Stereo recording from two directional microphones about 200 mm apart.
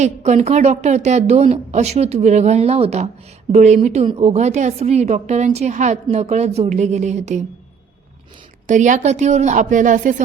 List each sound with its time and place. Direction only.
0.0 s a woman's voice: 35° right (ahead or behind)
8.6 s a woman's voice: 40° right (ahead or behind)